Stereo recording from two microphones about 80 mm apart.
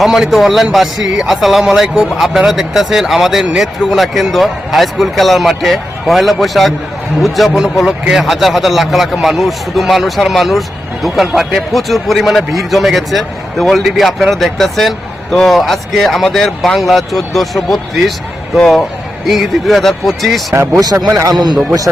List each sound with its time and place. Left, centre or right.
0.0 s a man's voice: centre
20.7 s a man's voice: right